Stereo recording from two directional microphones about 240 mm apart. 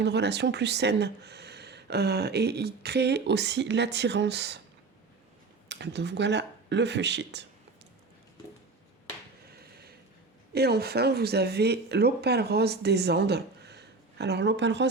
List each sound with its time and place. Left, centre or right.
0.0 s speech: right
5.6 s speech: right
9.5 s a sound: right
10.5 s speech: right